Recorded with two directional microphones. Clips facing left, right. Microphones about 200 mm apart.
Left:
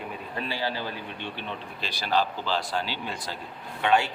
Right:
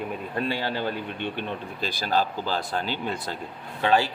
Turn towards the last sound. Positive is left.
turn(degrees=-35)  # may be behind; listen again after turning